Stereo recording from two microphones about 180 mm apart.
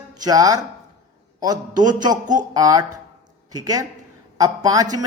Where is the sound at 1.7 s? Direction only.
45° right (ahead or behind).